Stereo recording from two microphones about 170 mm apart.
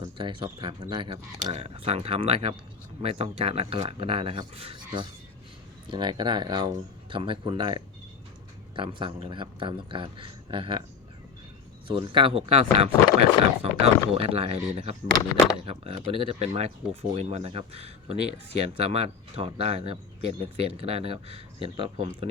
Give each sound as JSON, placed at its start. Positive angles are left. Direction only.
{"t": 0.0, "sound": "speech", "side_deg": -30}
{"t": 11.9, "sound": "speech", "side_deg": -30}